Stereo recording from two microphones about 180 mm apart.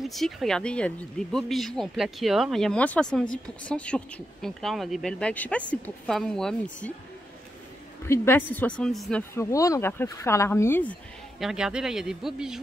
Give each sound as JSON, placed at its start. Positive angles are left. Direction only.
{"t": 0.0, "sound": "speech", "side_deg": 0}
{"t": 8.0, "sound": "speech", "side_deg": 10}
{"t": 9.3, "sound": "speech", "side_deg": 15}